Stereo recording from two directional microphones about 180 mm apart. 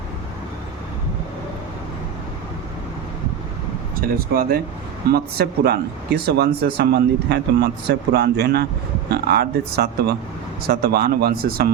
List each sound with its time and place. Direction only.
4.0 s speech: 55° right (ahead or behind)